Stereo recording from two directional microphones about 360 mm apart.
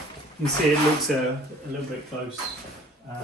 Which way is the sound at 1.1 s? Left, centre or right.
Centre.